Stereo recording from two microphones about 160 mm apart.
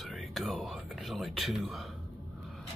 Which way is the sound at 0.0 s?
Centre (ahead or behind).